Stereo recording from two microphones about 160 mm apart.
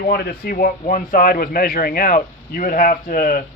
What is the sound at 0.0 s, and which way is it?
Speech, 70° left (ahead or behind).